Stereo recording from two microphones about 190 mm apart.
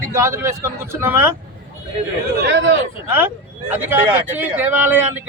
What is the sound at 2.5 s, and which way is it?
Speech, 75° right (ahead or behind).